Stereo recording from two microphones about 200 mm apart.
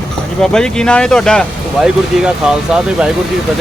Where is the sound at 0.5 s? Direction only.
5° left (ahead or behind).